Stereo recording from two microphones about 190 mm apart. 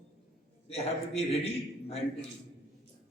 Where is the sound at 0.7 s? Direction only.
35° left (ahead or behind).